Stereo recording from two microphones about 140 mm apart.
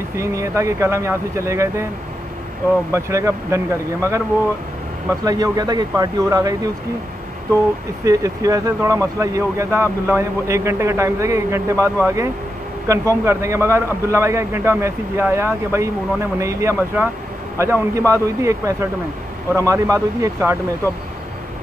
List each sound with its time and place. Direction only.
0.2 s a man's voice: 20° right (ahead or behind)
2.9 s a man's voice: 20° right (ahead or behind)
5.2 s a man's voice: 25° right (ahead or behind)
8.0 s a man's voice: 25° right (ahead or behind)